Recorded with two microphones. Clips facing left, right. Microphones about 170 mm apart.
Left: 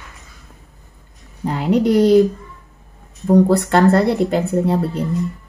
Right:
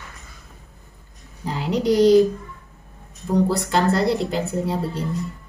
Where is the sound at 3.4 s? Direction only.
55° left (ahead or behind).